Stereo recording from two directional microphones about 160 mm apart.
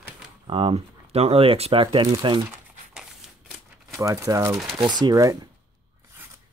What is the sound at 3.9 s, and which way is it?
Speech, 20° right (ahead or behind).